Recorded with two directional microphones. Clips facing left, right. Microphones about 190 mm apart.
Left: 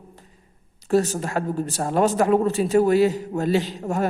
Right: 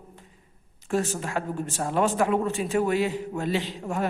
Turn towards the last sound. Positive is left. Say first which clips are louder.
# left 4 dB
turn(degrees=40)  # may be behind; listen again after turning